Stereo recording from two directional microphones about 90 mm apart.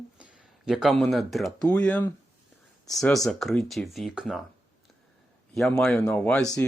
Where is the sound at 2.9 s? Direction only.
5° left (ahead or behind).